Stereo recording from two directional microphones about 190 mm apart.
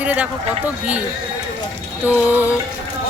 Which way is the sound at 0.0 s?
5° right (ahead or behind).